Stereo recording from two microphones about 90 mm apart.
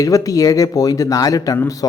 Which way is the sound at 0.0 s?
40° left (ahead or behind).